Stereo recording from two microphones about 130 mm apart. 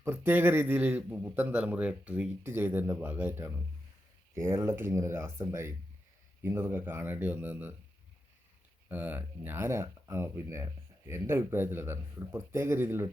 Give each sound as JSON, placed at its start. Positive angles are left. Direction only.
{"t": 0.0, "sound": "a man's voice", "side_deg": -15}
{"t": 8.9, "sound": "speech", "side_deg": -15}